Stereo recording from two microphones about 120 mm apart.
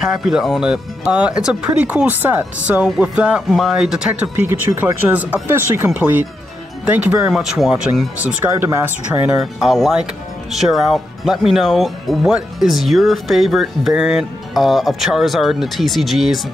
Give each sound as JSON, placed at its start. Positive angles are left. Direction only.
{"t": 0.0, "sound": "speech", "side_deg": -5}
{"t": 8.5, "sound": "speech", "side_deg": -20}
{"t": 9.3, "sound": "speech", "side_deg": -5}